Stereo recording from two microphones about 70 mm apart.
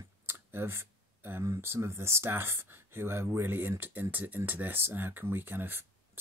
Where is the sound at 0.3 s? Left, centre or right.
Right.